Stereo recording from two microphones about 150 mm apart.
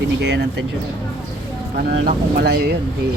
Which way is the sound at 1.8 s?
90° right.